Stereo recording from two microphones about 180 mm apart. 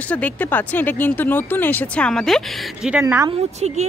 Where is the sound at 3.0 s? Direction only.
15° right (ahead or behind).